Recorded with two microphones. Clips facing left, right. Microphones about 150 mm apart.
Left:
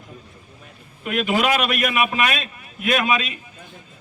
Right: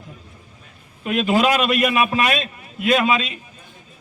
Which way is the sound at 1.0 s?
30° right (ahead or behind).